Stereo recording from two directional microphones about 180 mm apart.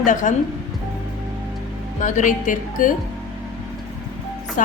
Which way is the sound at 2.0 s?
45° left (ahead or behind).